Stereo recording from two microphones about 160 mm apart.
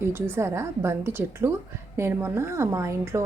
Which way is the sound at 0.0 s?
15° right (ahead or behind).